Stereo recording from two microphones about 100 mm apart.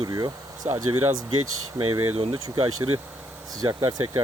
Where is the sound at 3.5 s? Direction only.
40° right (ahead or behind).